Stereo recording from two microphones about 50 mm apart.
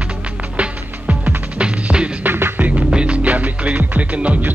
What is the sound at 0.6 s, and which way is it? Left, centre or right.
Music, right.